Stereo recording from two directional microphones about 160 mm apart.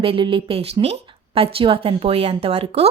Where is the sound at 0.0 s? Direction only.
35° right (ahead or behind).